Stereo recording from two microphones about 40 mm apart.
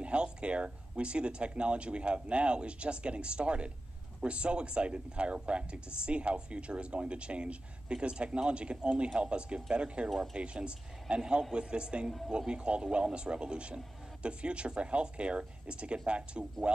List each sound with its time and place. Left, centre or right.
0.0 s speech: right